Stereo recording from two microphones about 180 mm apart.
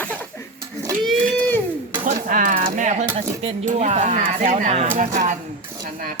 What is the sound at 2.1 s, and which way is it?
Speech, 50° right (ahead or behind).